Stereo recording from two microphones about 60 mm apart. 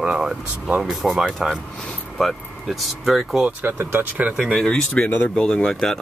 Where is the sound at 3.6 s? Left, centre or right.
Right.